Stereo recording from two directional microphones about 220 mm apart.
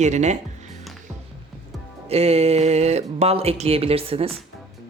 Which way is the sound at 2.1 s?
30° right (ahead or behind).